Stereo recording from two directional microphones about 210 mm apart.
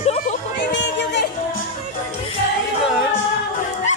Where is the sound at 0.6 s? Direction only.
55° left (ahead or behind).